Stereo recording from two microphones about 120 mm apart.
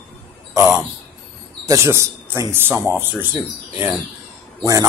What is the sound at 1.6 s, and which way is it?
Speech, 25° right (ahead or behind).